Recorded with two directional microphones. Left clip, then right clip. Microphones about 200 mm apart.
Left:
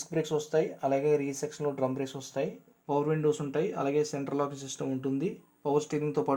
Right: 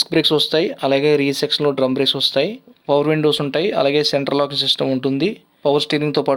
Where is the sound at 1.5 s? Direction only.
45° right (ahead or behind).